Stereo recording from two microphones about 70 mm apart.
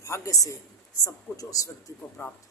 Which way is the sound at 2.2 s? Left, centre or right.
Left.